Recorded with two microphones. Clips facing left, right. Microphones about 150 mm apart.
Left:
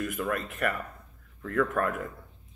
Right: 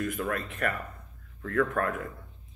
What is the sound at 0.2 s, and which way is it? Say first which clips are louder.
Speech: left 1 dB; 5° left (ahead or behind).